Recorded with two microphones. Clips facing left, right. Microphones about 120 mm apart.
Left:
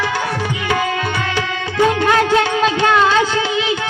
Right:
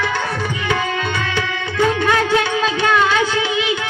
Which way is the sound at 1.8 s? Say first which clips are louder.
Left 2 dB; 25° left (ahead or behind).